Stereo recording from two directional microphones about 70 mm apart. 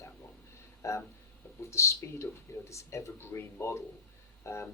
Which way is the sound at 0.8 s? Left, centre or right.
Left.